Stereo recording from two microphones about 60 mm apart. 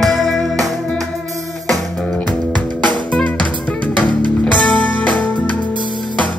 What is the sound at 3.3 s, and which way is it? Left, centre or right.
Music, left.